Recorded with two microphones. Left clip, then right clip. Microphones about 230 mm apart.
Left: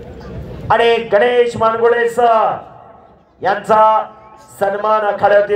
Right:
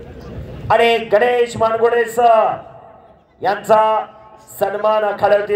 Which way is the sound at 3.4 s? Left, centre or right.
Right.